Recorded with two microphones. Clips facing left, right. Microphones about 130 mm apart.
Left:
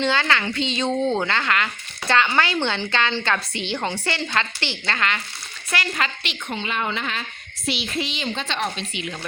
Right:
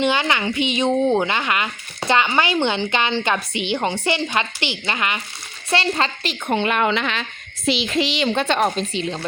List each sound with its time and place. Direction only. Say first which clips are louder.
0.0 s a woman's voice: right 2 dB; 15° right (ahead or behind)
5.7 s speech: right 5 dB; 30° right (ahead or behind)
6.5 s a woman's voice: right 8 dB; 60° right (ahead or behind); by 9.1 s 35° right (ahead or behind)